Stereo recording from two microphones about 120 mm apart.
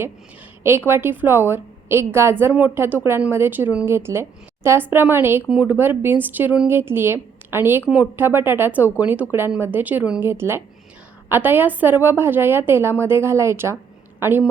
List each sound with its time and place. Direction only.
0.6 s a woman's voice: 20° right (ahead or behind)